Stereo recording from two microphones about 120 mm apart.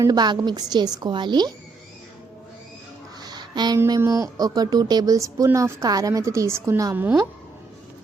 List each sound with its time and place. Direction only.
0.0 s a woman's voice: 35° right (ahead or behind)
3.2 s a sound: 35° right (ahead or behind)
3.8 s speech: 30° right (ahead or behind)
6.9 s a woman's voice: 15° right (ahead or behind)